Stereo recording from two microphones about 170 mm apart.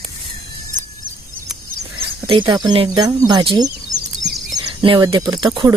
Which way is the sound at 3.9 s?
20° right (ahead or behind).